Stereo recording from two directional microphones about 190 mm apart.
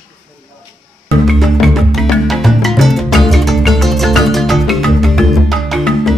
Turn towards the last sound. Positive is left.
turn(degrees=0)  # may be behind; listen again after turning